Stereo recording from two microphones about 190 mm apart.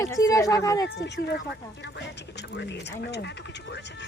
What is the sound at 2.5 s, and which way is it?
Speech, 65° left (ahead or behind).